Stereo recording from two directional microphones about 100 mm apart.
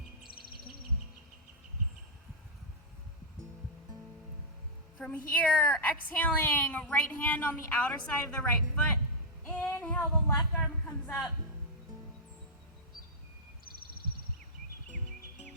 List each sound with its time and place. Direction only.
4.9 s speech: 15° left (ahead or behind)
9.5 s female singing: 20° left (ahead or behind)
10.3 s a sound: 10° left (ahead or behind)